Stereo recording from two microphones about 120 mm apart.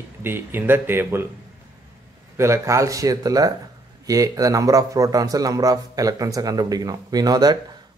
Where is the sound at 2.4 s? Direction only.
25° right (ahead or behind).